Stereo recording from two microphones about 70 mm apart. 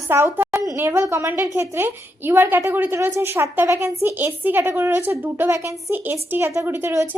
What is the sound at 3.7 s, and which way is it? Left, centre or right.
Speech, right.